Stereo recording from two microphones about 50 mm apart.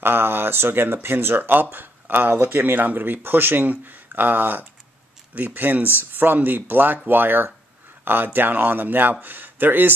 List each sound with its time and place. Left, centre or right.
0.0 s speech: right